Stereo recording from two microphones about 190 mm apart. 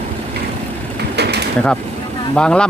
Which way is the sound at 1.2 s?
60° right (ahead or behind).